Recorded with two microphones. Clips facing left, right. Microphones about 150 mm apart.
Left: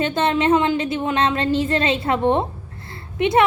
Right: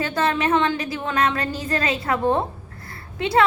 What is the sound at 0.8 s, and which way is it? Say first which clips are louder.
A woman's voice: left 3 dB; 25° left (ahead or behind).